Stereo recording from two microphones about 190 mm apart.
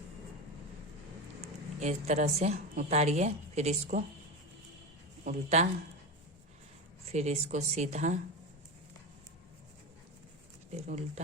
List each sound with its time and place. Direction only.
1.4 s a woman's voice: 35° right (ahead or behind)
5.2 s speech: 35° right (ahead or behind)
7.0 s speech: 35° right (ahead or behind)
10.8 s speech: 35° right (ahead or behind)